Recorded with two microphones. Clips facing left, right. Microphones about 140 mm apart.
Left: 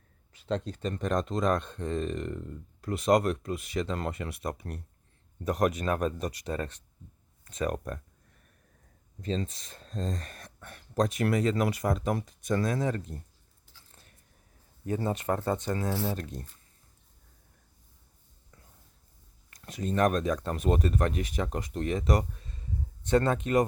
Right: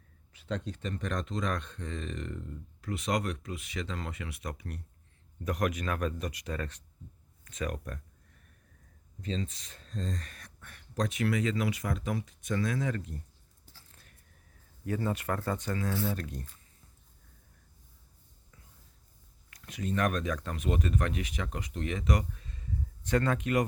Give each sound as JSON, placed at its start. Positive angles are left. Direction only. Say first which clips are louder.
{"t": 0.3, "sound": "speech", "louder": "left 4 dB", "side_deg": 35}
{"t": 9.2, "sound": "speech", "louder": "left 3 dB", "side_deg": 40}
{"t": 14.8, "sound": "speech", "louder": "left 3 dB", "side_deg": 25}
{"t": 19.6, "sound": "speech", "louder": "left 4 dB", "side_deg": 35}
{"t": 23.0, "sound": "speech", "louder": "left 3 dB", "side_deg": 25}